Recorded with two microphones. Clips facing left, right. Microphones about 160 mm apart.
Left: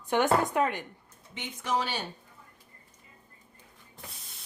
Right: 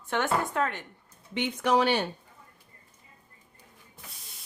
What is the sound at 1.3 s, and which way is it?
Speech, 65° right (ahead or behind).